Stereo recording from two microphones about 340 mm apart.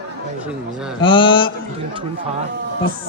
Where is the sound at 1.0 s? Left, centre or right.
Centre.